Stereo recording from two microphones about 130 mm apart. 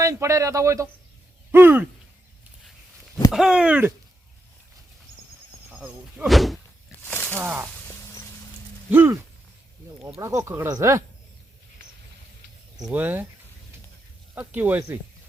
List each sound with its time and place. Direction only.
0.0 s speech: 25° right (ahead or behind)
1.5 s a sound: 15° right (ahead or behind)
3.3 s speech: 5° right (ahead or behind)
5.7 s speech: 10° right (ahead or behind)
7.0 s a sound: 15° left (ahead or behind)
7.3 s speech: 15° right (ahead or behind)
8.9 s speech: 20° right (ahead or behind)
12.9 s speech: 15° right (ahead or behind)
14.3 s speech: 15° right (ahead or behind)